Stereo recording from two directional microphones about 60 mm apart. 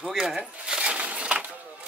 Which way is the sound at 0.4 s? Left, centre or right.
Centre.